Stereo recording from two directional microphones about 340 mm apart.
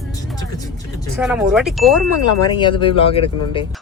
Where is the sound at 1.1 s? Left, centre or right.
Centre.